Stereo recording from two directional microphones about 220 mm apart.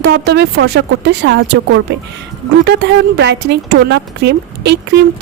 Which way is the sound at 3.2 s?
50° right (ahead or behind).